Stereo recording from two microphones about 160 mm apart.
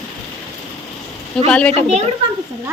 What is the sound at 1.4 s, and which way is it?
Speech, 10° left (ahead or behind).